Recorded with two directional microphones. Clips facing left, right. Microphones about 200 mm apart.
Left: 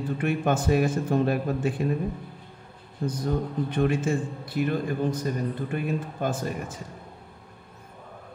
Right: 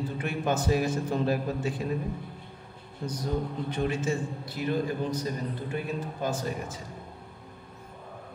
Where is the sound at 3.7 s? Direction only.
55° left (ahead or behind).